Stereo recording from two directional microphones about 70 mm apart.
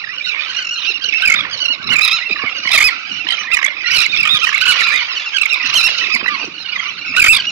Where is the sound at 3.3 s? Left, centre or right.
Right.